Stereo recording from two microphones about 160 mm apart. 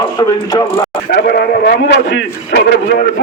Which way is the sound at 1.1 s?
85° left.